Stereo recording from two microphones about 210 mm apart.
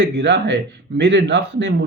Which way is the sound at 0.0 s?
55° right (ahead or behind).